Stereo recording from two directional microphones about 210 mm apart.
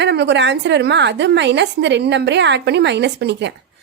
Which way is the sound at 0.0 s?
55° right (ahead or behind).